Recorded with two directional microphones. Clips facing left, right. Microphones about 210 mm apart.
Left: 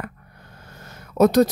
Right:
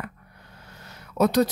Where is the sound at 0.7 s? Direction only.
45° left (ahead or behind).